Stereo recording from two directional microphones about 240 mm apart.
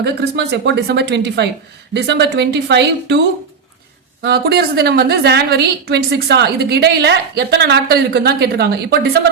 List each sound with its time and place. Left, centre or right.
0.0 s a woman's voice: right
4.2 s a woman's voice: right